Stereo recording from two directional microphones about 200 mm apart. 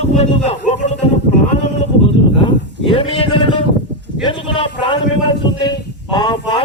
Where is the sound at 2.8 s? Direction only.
25° left (ahead or behind).